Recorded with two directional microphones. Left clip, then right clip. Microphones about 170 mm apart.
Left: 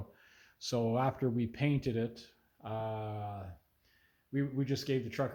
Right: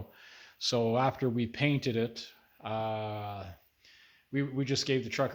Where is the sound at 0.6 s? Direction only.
20° right (ahead or behind).